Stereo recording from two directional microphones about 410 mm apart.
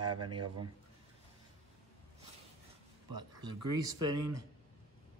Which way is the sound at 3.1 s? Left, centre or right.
Right.